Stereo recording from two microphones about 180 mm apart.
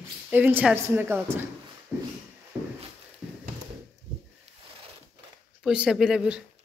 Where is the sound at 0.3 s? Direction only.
10° right (ahead or behind).